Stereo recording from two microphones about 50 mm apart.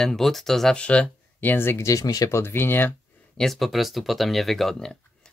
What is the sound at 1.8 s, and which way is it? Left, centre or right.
Speech, left.